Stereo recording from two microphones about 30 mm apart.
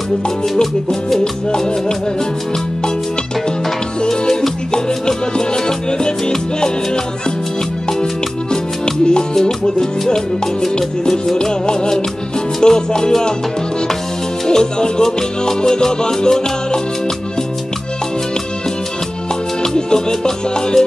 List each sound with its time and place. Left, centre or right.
4.1 s music: centre
5.7 s salsa music: left
8.8 s music: left
9.3 s music: centre
12.6 s salsa music: left
14.5 s salsa music: left
19.6 s music: left